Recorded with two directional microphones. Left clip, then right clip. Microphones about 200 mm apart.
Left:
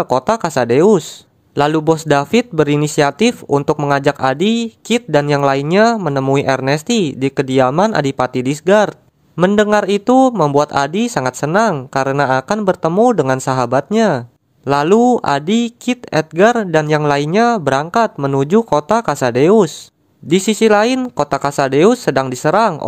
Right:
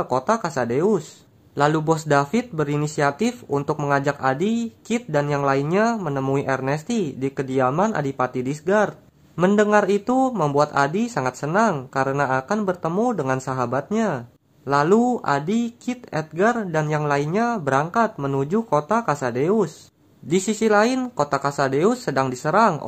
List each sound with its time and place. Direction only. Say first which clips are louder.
0.0 s a man's voice: left 6 dB; 40° left (ahead or behind)